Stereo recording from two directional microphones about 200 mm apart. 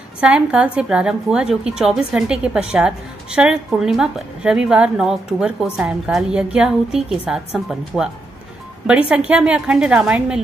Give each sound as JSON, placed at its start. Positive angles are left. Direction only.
{"t": 0.2, "sound": "a woman's voice", "side_deg": -5}
{"t": 9.1, "sound": "a woman's voice", "side_deg": -5}